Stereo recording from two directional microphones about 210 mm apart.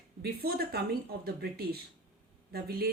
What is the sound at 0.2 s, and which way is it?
Speech, 50° right (ahead or behind).